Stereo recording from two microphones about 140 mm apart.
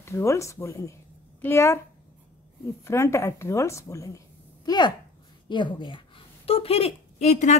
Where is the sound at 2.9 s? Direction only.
20° left (ahead or behind).